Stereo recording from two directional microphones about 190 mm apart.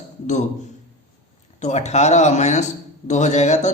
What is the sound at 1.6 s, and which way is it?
A man's voice, 35° left (ahead or behind).